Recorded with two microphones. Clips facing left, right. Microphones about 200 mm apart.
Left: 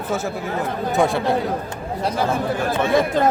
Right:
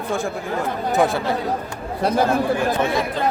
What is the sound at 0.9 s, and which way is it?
Speech, centre (ahead or behind).